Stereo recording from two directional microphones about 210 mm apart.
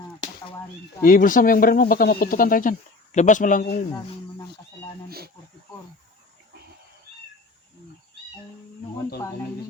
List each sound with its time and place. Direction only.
1.0 s speech: 40° left (ahead or behind)
5.0 s snake: 45° right (ahead or behind)